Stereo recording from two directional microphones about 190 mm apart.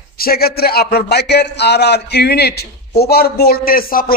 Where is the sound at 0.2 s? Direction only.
55° left (ahead or behind).